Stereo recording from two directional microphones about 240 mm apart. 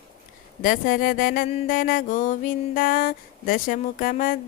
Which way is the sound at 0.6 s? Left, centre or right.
Left.